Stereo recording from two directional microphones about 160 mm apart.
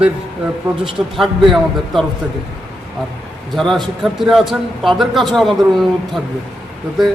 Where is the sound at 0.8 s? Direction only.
Centre (ahead or behind).